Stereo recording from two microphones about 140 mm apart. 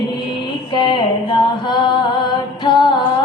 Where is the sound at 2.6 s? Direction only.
30° left (ahead or behind).